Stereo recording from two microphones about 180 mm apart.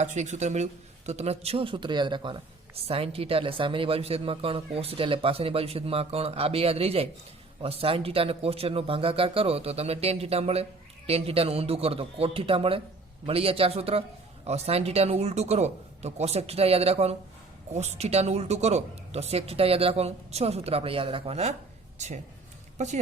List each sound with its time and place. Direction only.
0.0 s a man's voice: 40° right (ahead or behind)